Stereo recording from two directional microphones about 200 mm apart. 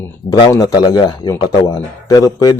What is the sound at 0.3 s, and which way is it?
A man's voice, 20° left (ahead or behind).